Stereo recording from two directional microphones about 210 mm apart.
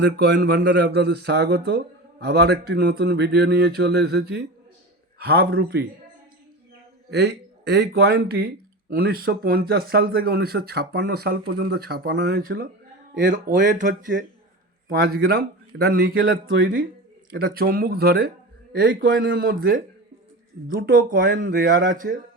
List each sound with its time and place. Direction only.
0.0 s speech: 50° right (ahead or behind)
7.1 s speech: 55° right (ahead or behind)